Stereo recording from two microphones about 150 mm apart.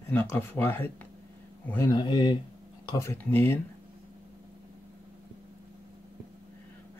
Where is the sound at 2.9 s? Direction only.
20° left (ahead or behind).